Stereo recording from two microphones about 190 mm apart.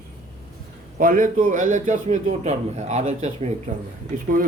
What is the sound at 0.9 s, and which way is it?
A man's voice, 45° right (ahead or behind).